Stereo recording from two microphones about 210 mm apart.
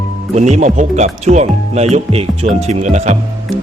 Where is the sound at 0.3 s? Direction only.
35° right (ahead or behind).